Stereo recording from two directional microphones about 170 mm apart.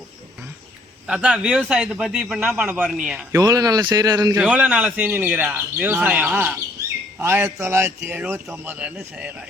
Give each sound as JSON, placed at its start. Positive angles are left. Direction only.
{"t": 1.0, "sound": "a man's voice", "side_deg": -5}
{"t": 3.3, "sound": "speech", "side_deg": -20}
{"t": 4.4, "sound": "speech", "side_deg": -5}